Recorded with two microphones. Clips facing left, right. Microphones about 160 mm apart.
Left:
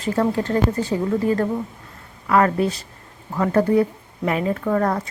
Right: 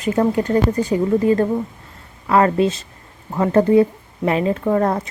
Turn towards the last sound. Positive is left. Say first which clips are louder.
# right 3 dB
turn(degrees=-25)  # may be behind; listen again after turning